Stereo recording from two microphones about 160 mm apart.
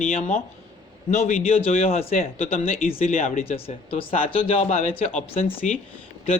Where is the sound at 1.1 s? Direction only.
45° left (ahead or behind).